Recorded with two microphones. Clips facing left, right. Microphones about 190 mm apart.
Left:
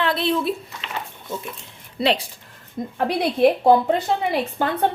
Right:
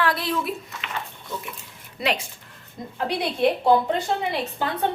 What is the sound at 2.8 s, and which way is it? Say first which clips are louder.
Speech: left 8 dB; 50° left (ahead or behind).